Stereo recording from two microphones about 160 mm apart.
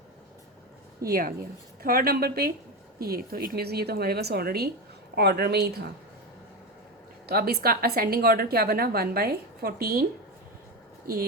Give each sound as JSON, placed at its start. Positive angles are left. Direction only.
{"t": 1.0, "sound": "a woman's voice", "side_deg": -65}
{"t": 7.3, "sound": "a woman's voice", "side_deg": -70}